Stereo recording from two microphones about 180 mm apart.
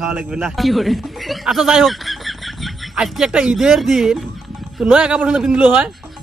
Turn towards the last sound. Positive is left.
turn(degrees=-5)  # may be behind; listen again after turning